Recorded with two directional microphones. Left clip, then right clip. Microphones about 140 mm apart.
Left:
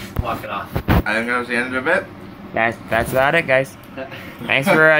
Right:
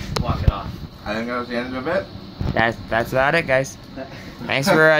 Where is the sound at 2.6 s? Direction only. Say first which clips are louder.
Left 1 dB; 5° right (ahead or behind).